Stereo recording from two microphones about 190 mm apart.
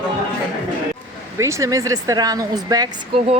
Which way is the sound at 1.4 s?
15° right (ahead or behind).